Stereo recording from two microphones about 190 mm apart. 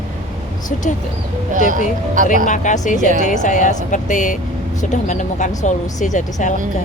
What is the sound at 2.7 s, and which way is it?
Speech, 40° left (ahead or behind).